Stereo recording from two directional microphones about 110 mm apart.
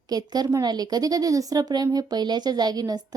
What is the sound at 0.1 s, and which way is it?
A woman's voice, 40° right (ahead or behind).